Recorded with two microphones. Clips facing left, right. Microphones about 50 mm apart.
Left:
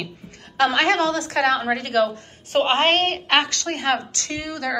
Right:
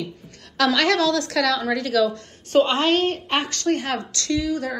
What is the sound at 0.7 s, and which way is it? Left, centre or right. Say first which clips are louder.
A woman's voice: even; left.